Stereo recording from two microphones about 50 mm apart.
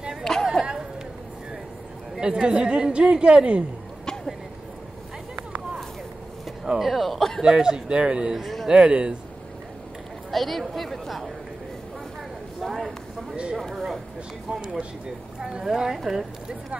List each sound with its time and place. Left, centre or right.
0.2 s chatter: centre
2.4 s a woman's voice: centre
6.6 s speech: centre
7.4 s a man's voice: centre
10.3 s a woman's voice: centre
12.5 s a sound: centre
13.6 s a woman's voice: centre
14.5 s a man's voice: centre
15.6 s a woman's voice: centre